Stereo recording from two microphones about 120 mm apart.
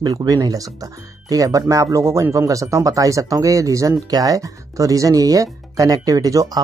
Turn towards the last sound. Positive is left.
turn(degrees=-30)  # may be behind; listen again after turning